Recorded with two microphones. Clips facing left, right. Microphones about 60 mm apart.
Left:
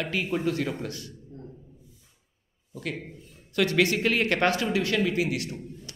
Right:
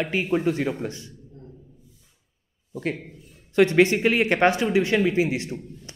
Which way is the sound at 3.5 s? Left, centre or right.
Right.